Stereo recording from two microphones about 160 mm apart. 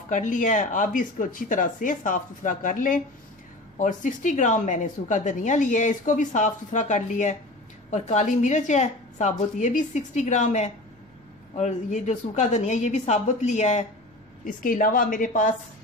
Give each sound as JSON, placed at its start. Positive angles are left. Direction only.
{"t": 0.1, "sound": "a woman's voice", "side_deg": 55}
{"t": 14.4, "sound": "speech", "side_deg": 60}